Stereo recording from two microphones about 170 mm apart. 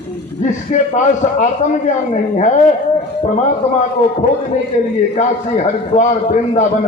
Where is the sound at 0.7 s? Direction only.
45° left (ahead or behind).